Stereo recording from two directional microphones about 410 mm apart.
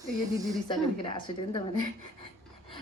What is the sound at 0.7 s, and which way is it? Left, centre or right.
Speech, centre.